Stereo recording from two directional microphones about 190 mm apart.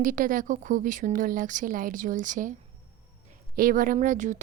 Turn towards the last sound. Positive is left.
turn(degrees=-40)  # may be behind; listen again after turning